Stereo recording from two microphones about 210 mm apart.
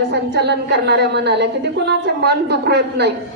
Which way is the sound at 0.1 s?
55° right (ahead or behind).